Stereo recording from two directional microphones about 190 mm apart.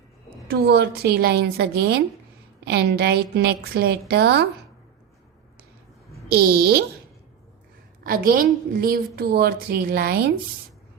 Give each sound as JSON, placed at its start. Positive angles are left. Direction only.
{"t": 0.4, "sound": "a woman's voice", "side_deg": -55}
{"t": 6.3, "sound": "a woman's voice", "side_deg": -55}
{"t": 8.0, "sound": "a woman's voice", "side_deg": -50}